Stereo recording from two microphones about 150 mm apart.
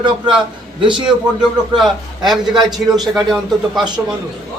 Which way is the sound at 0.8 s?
35° right (ahead or behind).